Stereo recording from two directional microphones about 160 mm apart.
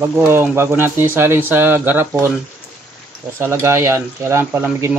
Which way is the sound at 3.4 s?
15° right (ahead or behind).